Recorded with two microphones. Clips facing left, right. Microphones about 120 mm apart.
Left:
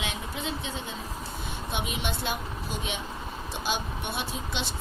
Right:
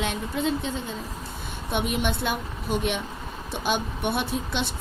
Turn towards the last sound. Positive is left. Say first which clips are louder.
# right 5 dB
turn(degrees=-55)  # may be behind; listen again after turning